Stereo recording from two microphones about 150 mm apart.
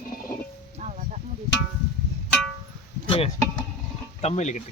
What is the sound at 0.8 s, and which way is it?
Music, 50° right (ahead or behind).